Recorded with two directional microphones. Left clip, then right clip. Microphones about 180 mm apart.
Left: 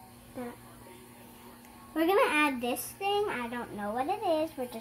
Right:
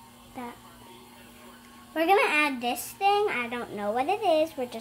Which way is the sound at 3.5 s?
30° right (ahead or behind).